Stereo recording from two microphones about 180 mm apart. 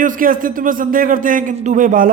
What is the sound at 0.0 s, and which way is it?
A man's voice, 50° right (ahead or behind).